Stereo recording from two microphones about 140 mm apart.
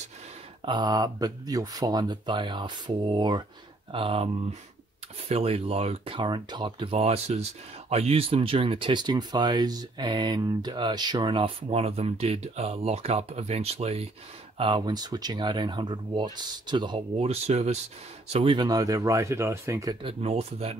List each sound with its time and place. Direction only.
0.7 s speech: 30° right (ahead or behind)
5.3 s speech: 45° right (ahead or behind)
14.6 s speech: 30° right (ahead or behind)
17.2 s speech: 50° right (ahead or behind)
18.3 s speech: 40° right (ahead or behind); by 20.0 s 25° right (ahead or behind)
20.0 s speech: 45° right (ahead or behind)